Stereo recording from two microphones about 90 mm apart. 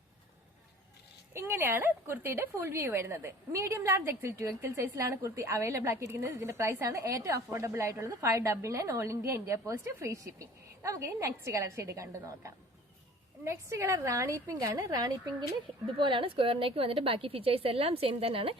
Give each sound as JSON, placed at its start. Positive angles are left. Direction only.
{"t": 1.3, "sound": "a woman's voice", "side_deg": -30}
{"t": 16.0, "sound": "a woman's voice", "side_deg": -65}